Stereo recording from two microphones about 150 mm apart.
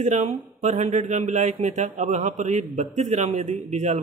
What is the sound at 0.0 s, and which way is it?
A man's voice, 50° right (ahead or behind).